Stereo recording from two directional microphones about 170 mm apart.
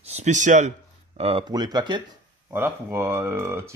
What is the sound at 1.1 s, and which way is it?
Speech, 35° right (ahead or behind).